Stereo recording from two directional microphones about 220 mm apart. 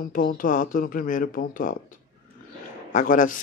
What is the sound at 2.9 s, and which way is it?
Speech, 35° left (ahead or behind).